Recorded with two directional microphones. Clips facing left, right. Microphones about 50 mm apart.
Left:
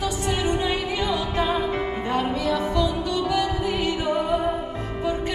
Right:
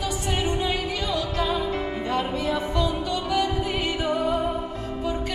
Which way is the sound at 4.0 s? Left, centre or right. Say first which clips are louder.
Left 1 dB; left.